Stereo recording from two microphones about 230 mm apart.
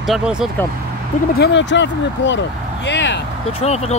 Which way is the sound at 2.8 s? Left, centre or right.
Left.